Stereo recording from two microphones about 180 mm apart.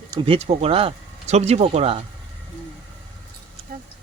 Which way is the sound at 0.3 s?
35° right (ahead or behind).